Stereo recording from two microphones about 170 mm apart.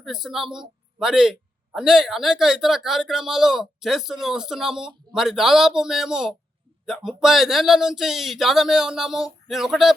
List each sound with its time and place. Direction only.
0.0 s a man's voice: centre (ahead or behind)